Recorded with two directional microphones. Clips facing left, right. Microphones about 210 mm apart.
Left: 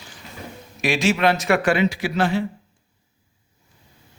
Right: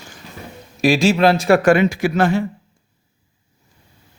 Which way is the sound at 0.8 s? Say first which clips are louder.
Right 5 dB; 35° right (ahead or behind).